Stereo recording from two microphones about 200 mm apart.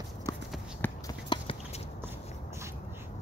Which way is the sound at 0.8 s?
10° left (ahead or behind).